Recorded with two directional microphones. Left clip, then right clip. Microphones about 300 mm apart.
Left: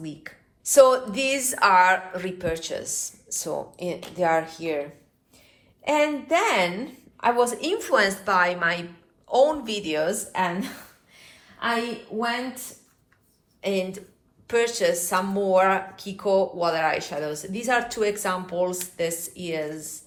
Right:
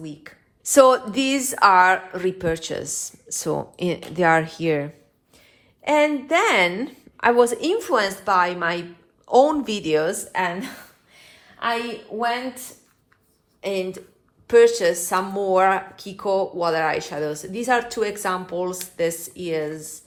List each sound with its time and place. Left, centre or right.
0.0 s a woman's voice: centre
0.6 s speech: right
5.8 s a woman's voice: right
13.6 s a woman's voice: centre